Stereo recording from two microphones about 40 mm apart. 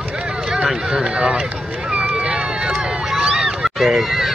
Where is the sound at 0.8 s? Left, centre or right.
Centre.